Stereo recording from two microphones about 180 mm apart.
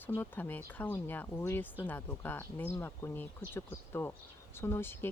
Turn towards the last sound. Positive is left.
turn(degrees=10)  # may be behind; listen again after turning